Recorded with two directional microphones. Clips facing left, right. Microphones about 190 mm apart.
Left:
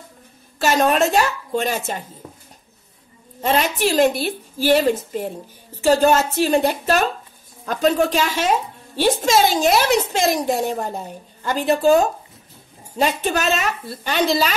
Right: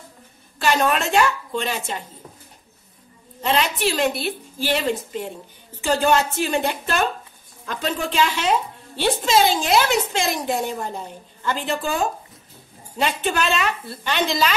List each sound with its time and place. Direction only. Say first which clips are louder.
0.6 s a woman's voice: left 4 dB; 40° left (ahead or behind)
3.4 s a woman's voice: left 2 dB; 45° left (ahead or behind)